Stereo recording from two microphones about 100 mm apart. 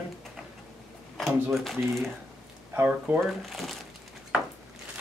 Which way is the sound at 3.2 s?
Centre (ahead or behind).